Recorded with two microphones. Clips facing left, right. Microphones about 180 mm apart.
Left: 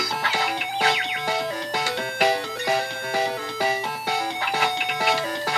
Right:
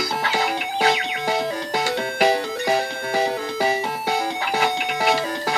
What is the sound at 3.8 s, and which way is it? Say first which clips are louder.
Music: right 3 dB; 20° right (ahead or behind).